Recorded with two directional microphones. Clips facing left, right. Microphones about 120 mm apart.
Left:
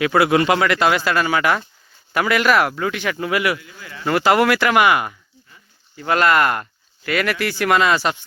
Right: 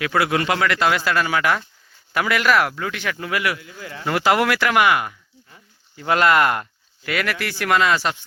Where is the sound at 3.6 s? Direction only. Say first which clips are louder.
Right 3 dB; 40° right (ahead or behind).